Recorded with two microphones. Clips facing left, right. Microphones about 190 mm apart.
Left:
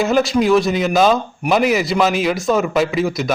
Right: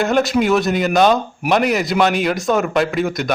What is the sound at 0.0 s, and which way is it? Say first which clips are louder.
A man's voice: left 1 dB; centre (ahead or behind).